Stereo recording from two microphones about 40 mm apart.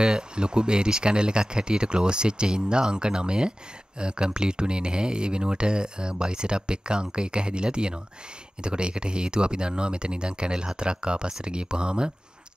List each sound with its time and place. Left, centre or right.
0.0 s speech: right